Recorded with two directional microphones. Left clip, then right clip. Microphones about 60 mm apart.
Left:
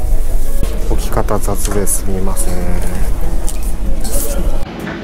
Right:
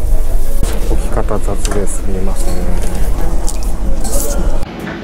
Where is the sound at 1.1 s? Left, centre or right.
Left.